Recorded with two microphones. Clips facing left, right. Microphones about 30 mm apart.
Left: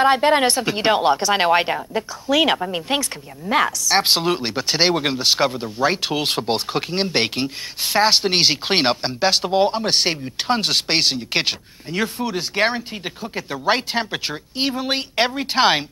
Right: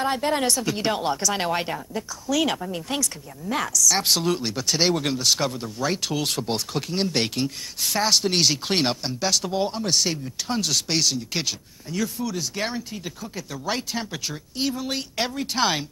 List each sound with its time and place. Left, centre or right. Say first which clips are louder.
0.0 s a woman's voice: left 8 dB; left